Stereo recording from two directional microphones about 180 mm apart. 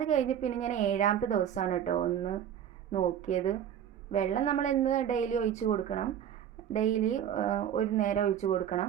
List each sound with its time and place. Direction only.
0.0 s a woman's voice: 40° left (ahead or behind)